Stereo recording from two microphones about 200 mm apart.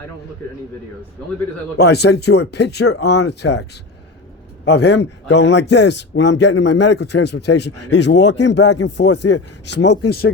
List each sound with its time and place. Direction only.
1.8 s a man's voice: 55° left (ahead or behind)